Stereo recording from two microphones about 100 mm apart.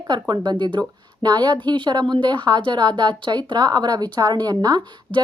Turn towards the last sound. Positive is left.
turn(degrees=-45)  # may be behind; listen again after turning